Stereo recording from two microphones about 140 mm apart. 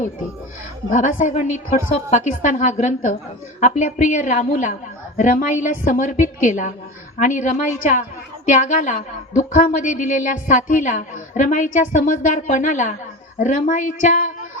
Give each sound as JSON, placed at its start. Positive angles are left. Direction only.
{"t": 0.9, "sound": "a woman's voice", "side_deg": 65}